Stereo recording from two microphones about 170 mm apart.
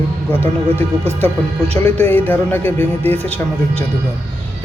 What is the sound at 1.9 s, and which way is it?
Speech, 10° left (ahead or behind).